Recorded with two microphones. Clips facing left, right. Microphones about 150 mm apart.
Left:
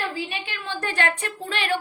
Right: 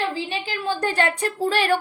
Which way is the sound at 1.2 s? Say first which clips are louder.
Right 8 dB; 35° right (ahead or behind).